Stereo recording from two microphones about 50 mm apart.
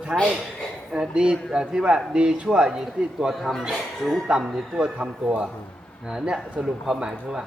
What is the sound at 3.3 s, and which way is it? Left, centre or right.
Speech, centre.